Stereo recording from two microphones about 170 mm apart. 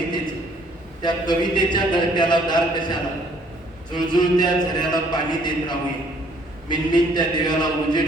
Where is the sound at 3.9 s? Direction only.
25° left (ahead or behind).